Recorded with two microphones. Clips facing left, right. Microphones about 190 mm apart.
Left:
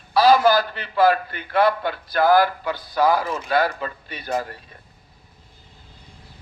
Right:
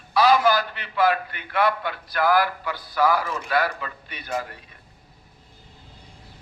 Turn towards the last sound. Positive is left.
turn(degrees=35)  # may be behind; listen again after turning